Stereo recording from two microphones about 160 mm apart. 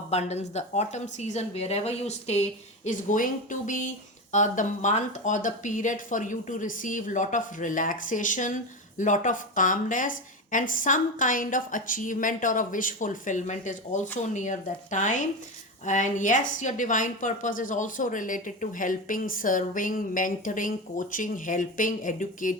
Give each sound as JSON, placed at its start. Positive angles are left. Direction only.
{"t": 0.1, "sound": "a woman's voice", "side_deg": 40}